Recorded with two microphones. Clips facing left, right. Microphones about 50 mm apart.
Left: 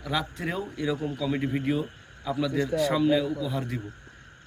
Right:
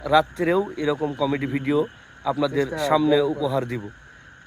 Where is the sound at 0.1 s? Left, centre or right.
Right.